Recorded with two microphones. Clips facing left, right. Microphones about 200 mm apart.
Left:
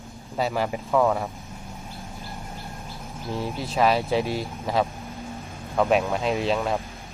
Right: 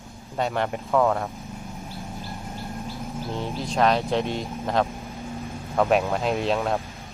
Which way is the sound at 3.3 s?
Centre (ahead or behind).